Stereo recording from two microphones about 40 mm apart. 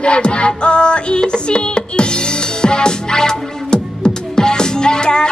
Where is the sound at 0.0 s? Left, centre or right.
Left.